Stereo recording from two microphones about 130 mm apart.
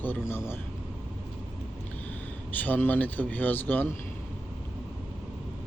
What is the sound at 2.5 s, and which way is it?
Speech, 15° left (ahead or behind).